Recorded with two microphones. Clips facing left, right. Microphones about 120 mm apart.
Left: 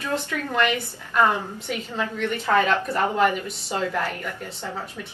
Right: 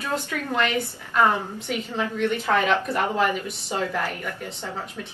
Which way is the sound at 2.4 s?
15° right (ahead or behind).